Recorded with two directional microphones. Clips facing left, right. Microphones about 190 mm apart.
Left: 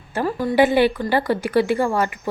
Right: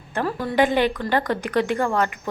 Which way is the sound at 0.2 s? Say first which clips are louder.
Left 3 dB; 5° left (ahead or behind).